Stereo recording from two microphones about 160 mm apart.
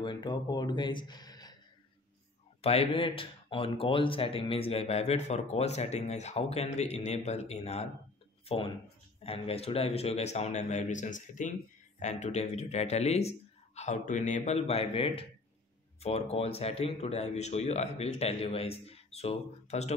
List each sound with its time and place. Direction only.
0.0 s speech: 30° left (ahead or behind)
2.6 s speech: 40° left (ahead or behind)